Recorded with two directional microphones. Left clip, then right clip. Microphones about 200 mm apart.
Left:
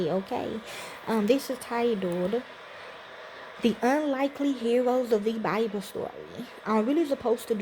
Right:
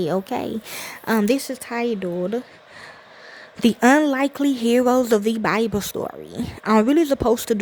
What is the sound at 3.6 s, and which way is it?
Speech, 45° right (ahead or behind).